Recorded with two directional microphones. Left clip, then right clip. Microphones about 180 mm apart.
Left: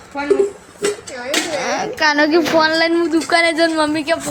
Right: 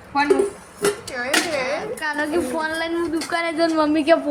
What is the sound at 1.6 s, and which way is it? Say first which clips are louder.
A woman's voice: left 8 dB; 45° left (ahead or behind).